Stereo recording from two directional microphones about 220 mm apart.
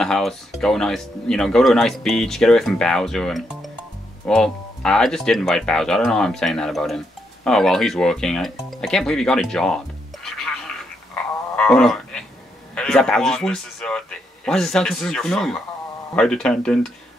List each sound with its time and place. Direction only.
0.0 s speech: centre (ahead or behind)
11.5 s a sound: 5° left (ahead or behind)
12.7 s speech: 5° left (ahead or behind)